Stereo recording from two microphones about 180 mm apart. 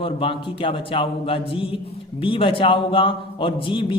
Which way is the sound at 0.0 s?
30° left (ahead or behind).